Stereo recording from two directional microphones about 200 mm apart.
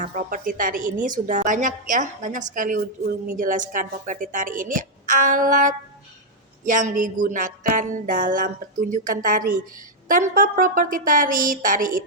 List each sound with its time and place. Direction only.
0.0 s music: 40° right (ahead or behind)
10.1 s a woman's voice: 40° right (ahead or behind)